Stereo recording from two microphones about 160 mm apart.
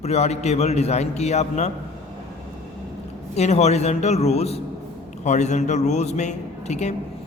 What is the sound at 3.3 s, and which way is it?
A man's voice, 45° left (ahead or behind).